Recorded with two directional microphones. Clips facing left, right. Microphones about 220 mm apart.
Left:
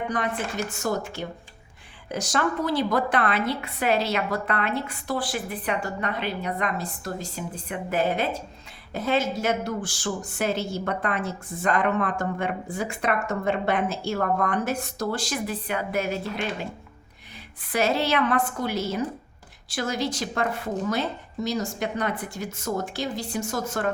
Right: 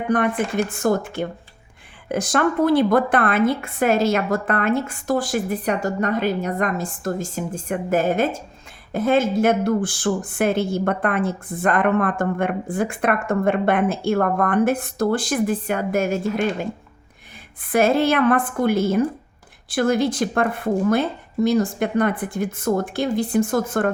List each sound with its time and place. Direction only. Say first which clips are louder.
0.1 s speech: right 8 dB; 55° right (ahead or behind)
17.7 s a woman's voice: right 6 dB; 50° right (ahead or behind)